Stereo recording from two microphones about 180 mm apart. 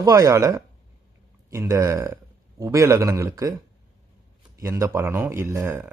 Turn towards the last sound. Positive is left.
turn(degrees=-15)  # may be behind; listen again after turning